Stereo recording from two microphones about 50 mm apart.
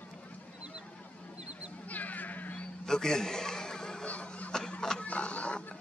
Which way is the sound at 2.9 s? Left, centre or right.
Centre.